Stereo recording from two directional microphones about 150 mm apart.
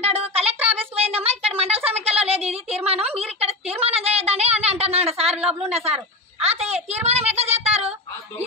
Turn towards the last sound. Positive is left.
turn(degrees=-45)  # may be behind; listen again after turning